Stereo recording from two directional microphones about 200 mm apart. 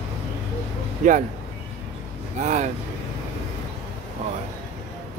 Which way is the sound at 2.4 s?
35° right (ahead or behind).